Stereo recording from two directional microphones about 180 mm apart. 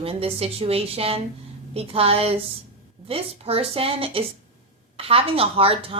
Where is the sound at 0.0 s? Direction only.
30° right (ahead or behind).